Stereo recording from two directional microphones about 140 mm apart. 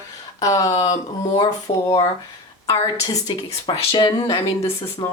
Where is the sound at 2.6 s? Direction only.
25° left (ahead or behind).